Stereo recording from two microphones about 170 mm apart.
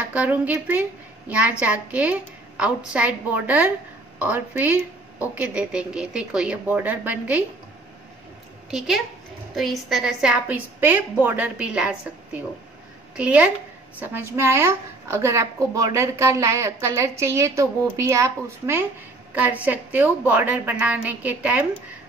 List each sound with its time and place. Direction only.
0.1 s a woman's voice: 10° right (ahead or behind)
8.6 s a woman's voice: centre (ahead or behind)